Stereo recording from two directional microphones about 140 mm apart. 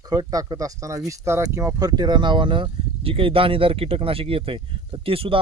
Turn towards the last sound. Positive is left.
turn(degrees=-40)  # may be behind; listen again after turning